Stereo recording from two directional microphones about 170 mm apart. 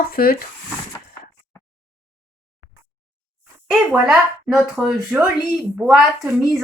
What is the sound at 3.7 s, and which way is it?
Speech, centre (ahead or behind).